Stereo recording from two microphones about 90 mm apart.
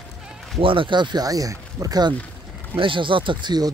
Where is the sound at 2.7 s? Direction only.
70° right (ahead or behind); by 3.7 s 55° right (ahead or behind).